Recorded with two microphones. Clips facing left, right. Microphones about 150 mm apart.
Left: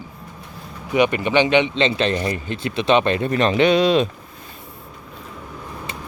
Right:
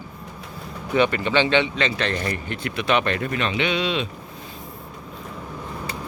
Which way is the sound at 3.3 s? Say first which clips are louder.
Left 11 dB; 40° left (ahead or behind).